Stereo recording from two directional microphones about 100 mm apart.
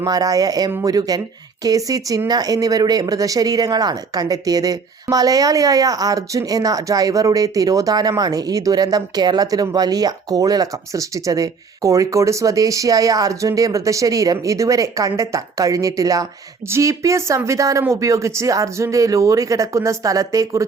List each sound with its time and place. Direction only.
0.0 s speech: 40° right (ahead or behind)